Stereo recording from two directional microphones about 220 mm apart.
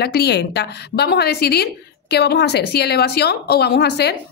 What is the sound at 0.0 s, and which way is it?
A woman's voice, 45° left (ahead or behind).